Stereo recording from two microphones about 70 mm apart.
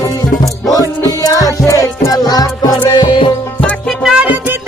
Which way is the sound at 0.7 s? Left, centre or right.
Left.